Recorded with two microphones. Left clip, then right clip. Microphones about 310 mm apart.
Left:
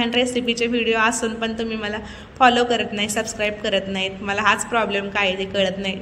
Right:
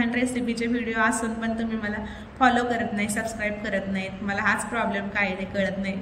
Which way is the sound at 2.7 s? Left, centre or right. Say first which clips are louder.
Left 5 dB; left.